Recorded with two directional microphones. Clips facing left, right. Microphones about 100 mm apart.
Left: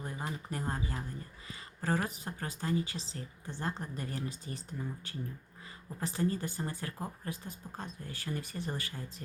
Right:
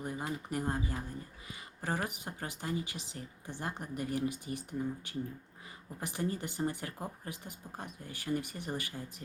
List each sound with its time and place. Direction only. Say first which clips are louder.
0.0 s speech: right 2 dB; 15° right (ahead or behind)